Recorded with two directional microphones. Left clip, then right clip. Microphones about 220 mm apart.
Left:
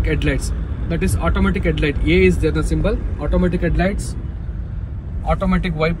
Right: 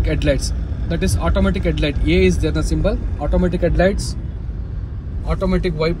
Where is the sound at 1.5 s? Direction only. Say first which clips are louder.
Left 1 dB; 20° left (ahead or behind).